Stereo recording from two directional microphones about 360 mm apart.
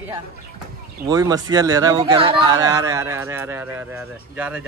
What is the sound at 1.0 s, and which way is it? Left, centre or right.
Speech, centre.